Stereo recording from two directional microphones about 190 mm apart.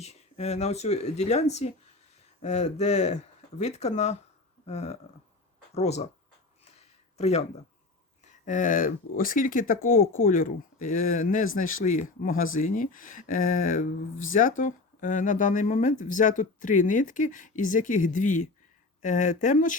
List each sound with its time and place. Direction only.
0.0 s speech: 35° left (ahead or behind)
6.7 s a sound: 35° left (ahead or behind)
8.2 s speech: 40° left (ahead or behind)